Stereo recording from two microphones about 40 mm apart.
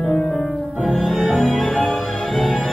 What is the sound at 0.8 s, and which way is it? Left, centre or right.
Music, centre.